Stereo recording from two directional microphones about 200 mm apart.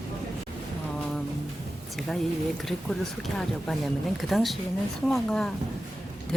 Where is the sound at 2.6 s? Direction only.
Centre (ahead or behind).